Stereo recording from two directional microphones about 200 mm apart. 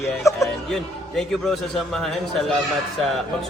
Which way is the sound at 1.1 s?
Centre (ahead or behind).